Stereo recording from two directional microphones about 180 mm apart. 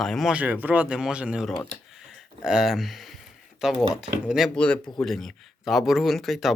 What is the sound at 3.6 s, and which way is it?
Speech, centre (ahead or behind).